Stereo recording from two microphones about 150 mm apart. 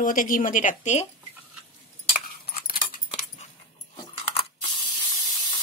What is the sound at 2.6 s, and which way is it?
Keys jangling, 75° left (ahead or behind).